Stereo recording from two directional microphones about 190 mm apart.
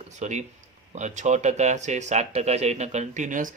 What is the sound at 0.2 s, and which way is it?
Speech, 35° right (ahead or behind).